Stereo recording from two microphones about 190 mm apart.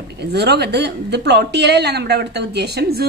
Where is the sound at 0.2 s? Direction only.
60° right (ahead or behind).